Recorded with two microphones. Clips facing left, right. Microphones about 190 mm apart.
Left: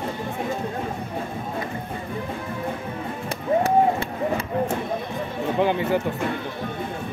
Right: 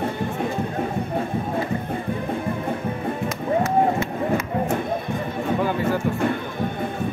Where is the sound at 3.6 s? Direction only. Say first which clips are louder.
Even; 30° left (ahead or behind).